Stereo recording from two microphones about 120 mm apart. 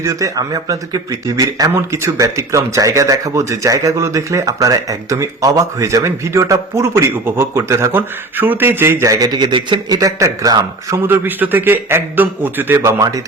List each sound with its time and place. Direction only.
0.0 s speech: 25° right (ahead or behind)